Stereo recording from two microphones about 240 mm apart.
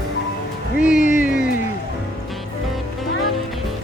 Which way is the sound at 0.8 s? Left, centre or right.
Left.